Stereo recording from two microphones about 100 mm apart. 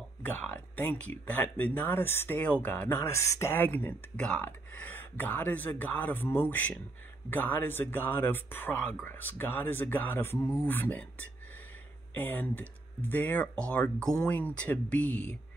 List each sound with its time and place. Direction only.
0.2 s speech: 20° left (ahead or behind)